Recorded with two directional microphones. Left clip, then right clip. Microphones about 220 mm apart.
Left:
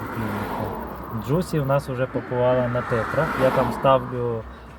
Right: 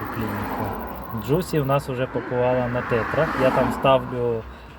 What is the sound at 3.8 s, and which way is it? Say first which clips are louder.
Speech: even; 15° right (ahead or behind).